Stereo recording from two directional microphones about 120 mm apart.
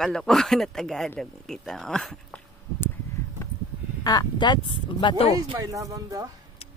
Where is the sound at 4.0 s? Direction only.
35° left (ahead or behind).